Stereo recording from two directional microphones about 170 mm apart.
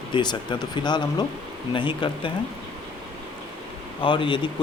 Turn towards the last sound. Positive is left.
turn(degrees=30)  # may be behind; listen again after turning